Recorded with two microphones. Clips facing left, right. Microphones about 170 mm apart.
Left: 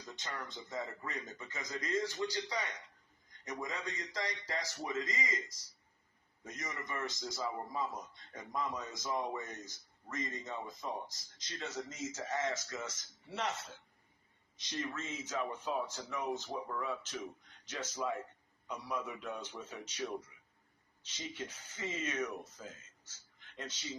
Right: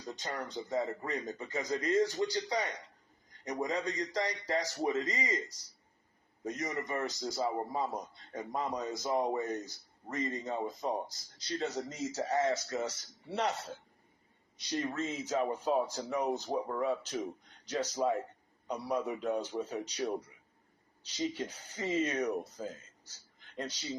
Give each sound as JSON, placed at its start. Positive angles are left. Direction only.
{"t": 0.0, "sound": "speech", "side_deg": -35}